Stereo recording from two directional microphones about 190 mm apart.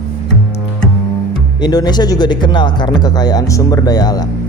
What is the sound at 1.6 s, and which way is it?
Speech, 20° left (ahead or behind).